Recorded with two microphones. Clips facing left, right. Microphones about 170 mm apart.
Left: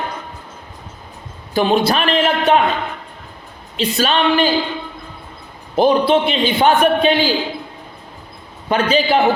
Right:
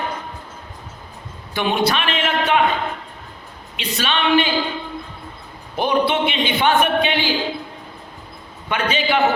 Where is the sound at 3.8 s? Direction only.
40° left (ahead or behind).